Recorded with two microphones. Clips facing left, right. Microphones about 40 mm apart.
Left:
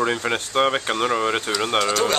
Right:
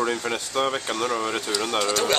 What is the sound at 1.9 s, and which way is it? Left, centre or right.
Speech, centre.